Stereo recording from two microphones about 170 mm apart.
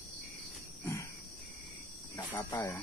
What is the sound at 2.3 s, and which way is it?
Speech, 20° left (ahead or behind).